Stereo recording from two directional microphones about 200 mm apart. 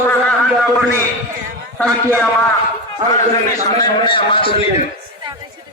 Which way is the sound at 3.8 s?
25° left (ahead or behind).